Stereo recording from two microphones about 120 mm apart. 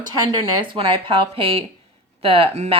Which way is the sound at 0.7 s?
45° right (ahead or behind).